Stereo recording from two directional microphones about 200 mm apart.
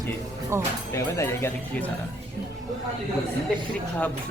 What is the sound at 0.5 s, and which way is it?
Speech, 15° right (ahead or behind).